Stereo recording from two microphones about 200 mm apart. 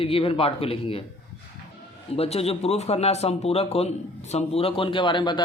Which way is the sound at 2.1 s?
30° left (ahead or behind).